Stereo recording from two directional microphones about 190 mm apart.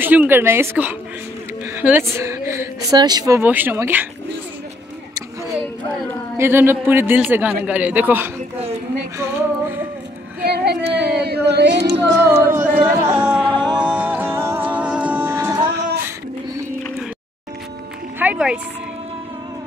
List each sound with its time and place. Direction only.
0.0 s a woman's voice: 10° right (ahead or behind)
6.3 s a woman's voice: 15° right (ahead or behind)
10.4 s child singing: 60° right (ahead or behind)
11.1 s a sound: 60° right (ahead or behind)
12.1 s a woman's voice: 10° right (ahead or behind)
13.5 s music: 25° right (ahead or behind)
13.8 s music: 10° right (ahead or behind)
18.2 s speech: 5° right (ahead or behind)